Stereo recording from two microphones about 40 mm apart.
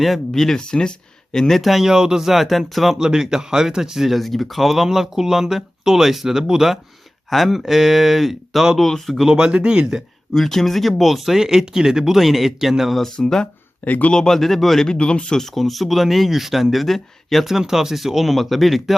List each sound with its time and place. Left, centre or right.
0.0 s a man's voice: centre
0.6 s speech: left
1.6 s speech: centre
3.0 s speech: centre
4.2 s speech: centre
7.3 s speech: centre
9.3 s speech: centre
10.3 s speech: centre
13.1 s speech: centre
13.8 s speech: left
14.1 s a man's voice: centre
14.8 s speech: left
15.4 s speech: centre
17.4 s speech: centre